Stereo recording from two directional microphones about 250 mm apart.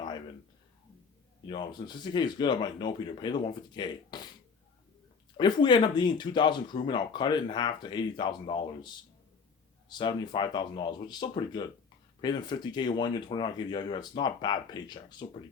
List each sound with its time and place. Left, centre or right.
1.5 s speech: centre
5.4 s speech: centre
9.9 s speech: centre